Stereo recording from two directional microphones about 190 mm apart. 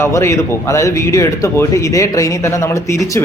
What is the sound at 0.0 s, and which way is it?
A man's voice, 15° left (ahead or behind).